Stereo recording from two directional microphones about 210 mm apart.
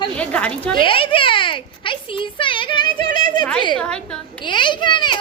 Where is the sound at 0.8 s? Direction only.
25° left (ahead or behind).